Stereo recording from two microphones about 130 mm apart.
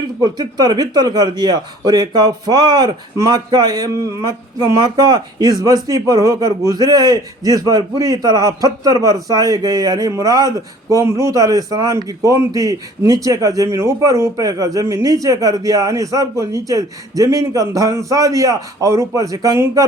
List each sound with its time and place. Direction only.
0.2 s a man's voice: 30° right (ahead or behind)